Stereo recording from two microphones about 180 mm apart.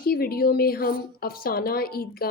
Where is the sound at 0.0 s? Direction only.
55° left (ahead or behind).